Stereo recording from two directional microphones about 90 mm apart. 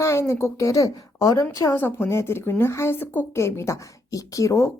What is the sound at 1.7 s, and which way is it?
A woman's voice, 25° left (ahead or behind).